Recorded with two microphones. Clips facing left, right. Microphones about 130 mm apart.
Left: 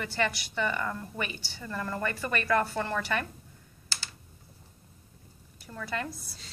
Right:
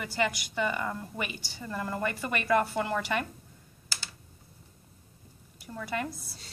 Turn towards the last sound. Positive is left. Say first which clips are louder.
# right 1 dB
turn(degrees=-15)  # may be behind; listen again after turning